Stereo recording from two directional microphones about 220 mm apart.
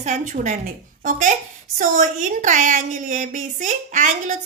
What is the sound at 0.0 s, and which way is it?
Speech, 35° right (ahead or behind).